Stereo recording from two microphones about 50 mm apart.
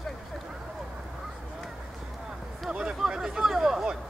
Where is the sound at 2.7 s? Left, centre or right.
Centre.